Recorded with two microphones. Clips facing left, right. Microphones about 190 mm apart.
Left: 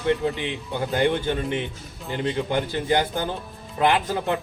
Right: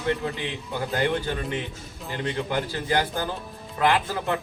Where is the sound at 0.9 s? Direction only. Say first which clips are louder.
Left 4 dB; 25° left (ahead or behind).